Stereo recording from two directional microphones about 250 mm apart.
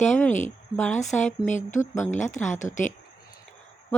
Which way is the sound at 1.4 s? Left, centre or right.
Left.